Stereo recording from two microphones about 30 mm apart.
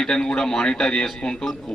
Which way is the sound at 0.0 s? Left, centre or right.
Centre.